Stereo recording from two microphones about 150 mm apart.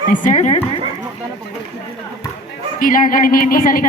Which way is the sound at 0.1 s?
55° left (ahead or behind).